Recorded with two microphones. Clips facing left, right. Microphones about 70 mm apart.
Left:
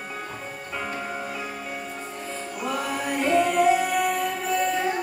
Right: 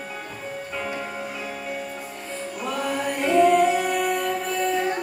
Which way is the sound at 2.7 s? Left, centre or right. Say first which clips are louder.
Right 1 dB; centre.